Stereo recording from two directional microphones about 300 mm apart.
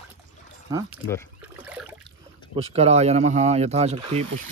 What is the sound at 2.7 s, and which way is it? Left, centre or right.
Speech, right.